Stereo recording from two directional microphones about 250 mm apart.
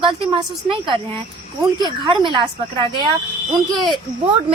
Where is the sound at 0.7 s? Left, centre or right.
Centre.